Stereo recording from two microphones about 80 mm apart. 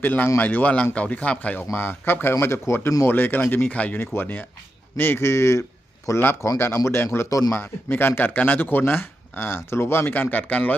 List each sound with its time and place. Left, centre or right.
0.0 s a man's voice: left
7.3 s a man's voice: left
7.5 s speech: left